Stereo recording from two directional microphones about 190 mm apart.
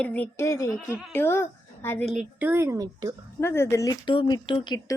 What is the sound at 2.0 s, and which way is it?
A woman's voice, 5° right (ahead or behind).